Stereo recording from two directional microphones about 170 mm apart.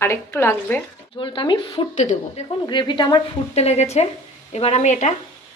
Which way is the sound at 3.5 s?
40° left (ahead or behind).